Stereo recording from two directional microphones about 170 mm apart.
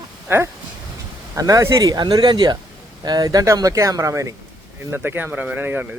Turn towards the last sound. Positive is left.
turn(degrees=-10)  # may be behind; listen again after turning